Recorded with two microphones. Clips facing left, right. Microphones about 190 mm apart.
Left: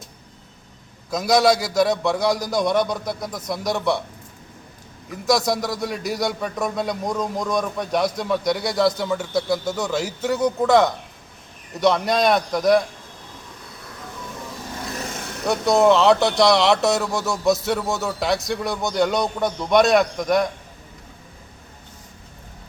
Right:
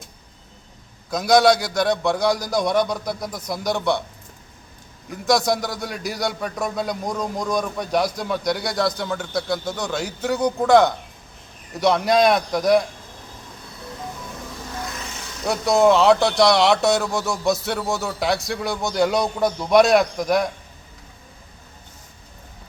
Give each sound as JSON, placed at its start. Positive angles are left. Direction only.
{"t": 1.1, "sound": "a man's voice", "side_deg": 5}
{"t": 5.1, "sound": "a man's voice", "side_deg": 5}
{"t": 14.9, "sound": "vehicle", "side_deg": 45}
{"t": 15.4, "sound": "a man's voice", "side_deg": 0}